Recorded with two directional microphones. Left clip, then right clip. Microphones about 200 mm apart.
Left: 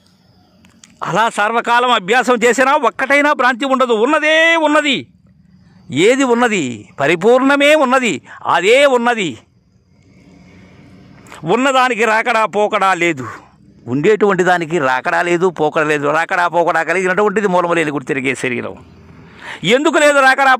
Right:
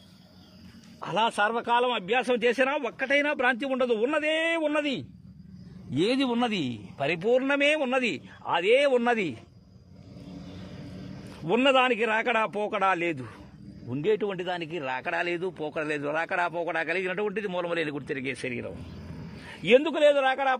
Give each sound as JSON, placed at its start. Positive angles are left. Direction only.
{"t": 0.9, "sound": "speech", "side_deg": 50}
{"t": 7.2, "sound": "speech", "side_deg": 45}
{"t": 9.0, "sound": "speech", "side_deg": 30}
{"t": 11.4, "sound": "a man's voice", "side_deg": 40}